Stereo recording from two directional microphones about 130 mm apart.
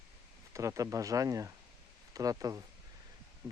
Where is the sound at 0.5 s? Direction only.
25° right (ahead or behind).